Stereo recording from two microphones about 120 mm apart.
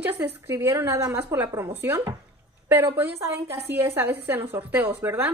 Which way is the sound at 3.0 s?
20° right (ahead or behind).